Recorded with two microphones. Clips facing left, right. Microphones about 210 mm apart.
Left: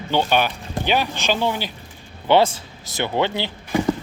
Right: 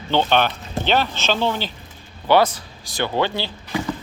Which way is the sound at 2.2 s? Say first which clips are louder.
Even; 25° left (ahead or behind).